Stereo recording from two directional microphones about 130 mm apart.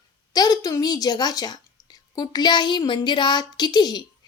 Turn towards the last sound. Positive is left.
turn(degrees=30)  # may be behind; listen again after turning